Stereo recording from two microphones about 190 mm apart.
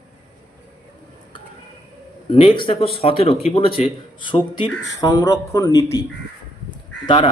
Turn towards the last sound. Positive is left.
turn(degrees=25)  # may be behind; listen again after turning